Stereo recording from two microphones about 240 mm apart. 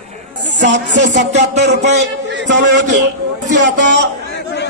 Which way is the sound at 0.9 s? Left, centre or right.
Right.